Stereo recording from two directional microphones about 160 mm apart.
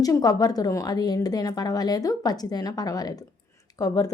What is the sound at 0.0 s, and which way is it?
A woman's voice, 25° left (ahead or behind).